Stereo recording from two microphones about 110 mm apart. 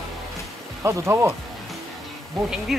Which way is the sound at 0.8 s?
25° right (ahead or behind).